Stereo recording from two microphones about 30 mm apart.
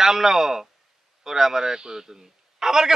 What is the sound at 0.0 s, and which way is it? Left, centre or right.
A man's voice, centre.